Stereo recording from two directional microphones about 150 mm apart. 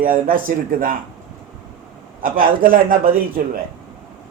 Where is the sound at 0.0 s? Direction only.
70° right (ahead or behind).